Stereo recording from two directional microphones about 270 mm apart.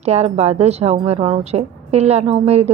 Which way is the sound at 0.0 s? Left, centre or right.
Right.